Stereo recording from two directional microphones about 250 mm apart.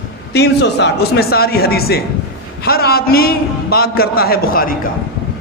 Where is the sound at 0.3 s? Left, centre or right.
Left.